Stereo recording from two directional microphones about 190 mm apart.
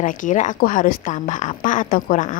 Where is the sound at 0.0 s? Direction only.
45° left (ahead or behind).